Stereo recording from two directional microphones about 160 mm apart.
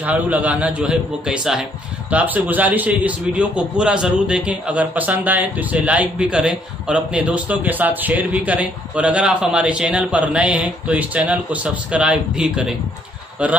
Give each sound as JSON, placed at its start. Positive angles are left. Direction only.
{"t": 0.0, "sound": "a man's voice", "side_deg": -10}